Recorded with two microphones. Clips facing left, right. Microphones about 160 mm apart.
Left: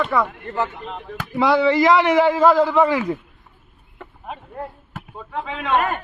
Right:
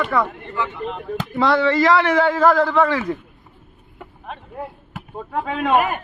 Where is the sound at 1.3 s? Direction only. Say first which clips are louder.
Left 1 dB; 10° left (ahead or behind).